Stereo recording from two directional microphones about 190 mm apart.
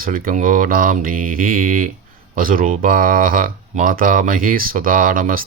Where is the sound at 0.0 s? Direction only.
50° right (ahead or behind).